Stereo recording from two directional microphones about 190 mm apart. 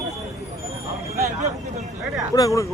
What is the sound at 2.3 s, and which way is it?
Speech, 15° left (ahead or behind).